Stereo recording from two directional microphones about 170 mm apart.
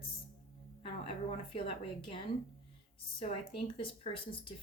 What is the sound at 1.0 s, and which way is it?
Speech, 35° left (ahead or behind).